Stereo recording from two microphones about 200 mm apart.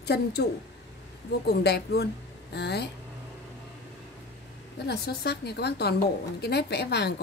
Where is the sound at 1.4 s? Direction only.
55° left (ahead or behind).